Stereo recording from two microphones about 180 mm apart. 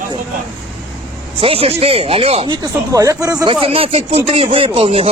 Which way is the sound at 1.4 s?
30° right (ahead or behind).